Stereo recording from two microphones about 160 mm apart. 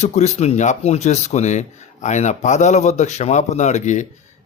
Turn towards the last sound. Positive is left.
turn(degrees=50)  # may be behind; listen again after turning